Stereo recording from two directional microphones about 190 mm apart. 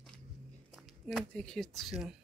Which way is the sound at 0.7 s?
Centre (ahead or behind).